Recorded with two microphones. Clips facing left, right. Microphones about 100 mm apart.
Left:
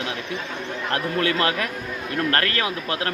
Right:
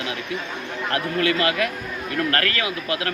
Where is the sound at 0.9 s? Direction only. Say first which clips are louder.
Right 1 dB; 35° left (ahead or behind).